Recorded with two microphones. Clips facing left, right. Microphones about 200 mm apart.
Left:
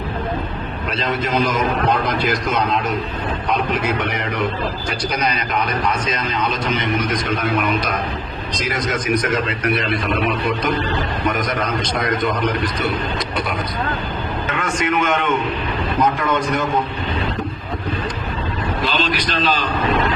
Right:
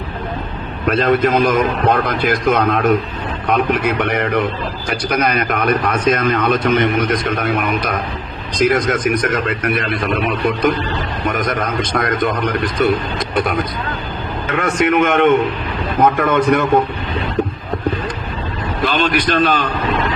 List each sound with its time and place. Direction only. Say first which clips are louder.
0.9 s a man's voice: right 9 dB; 55° right (ahead or behind)
14.5 s a man's voice: right 6 dB; 60° right (ahead or behind)
18.9 s a man's voice: right 8 dB; 55° right (ahead or behind)